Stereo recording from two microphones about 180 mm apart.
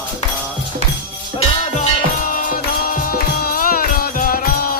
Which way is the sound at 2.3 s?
50° left (ahead or behind).